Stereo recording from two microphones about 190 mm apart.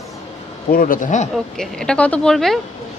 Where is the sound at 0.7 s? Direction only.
45° left (ahead or behind).